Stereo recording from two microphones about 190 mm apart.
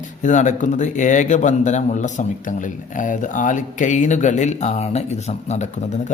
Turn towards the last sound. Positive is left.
turn(degrees=35)  # may be behind; listen again after turning